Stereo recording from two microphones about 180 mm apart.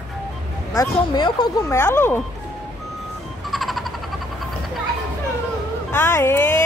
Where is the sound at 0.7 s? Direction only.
25° left (ahead or behind).